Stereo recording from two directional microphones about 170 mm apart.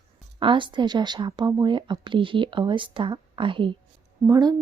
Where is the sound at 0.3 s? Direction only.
30° right (ahead or behind).